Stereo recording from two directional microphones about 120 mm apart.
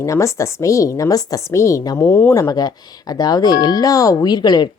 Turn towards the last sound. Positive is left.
turn(degrees=35)  # may be behind; listen again after turning